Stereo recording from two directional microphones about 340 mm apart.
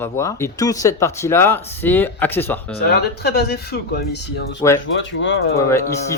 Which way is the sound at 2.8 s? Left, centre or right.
Left.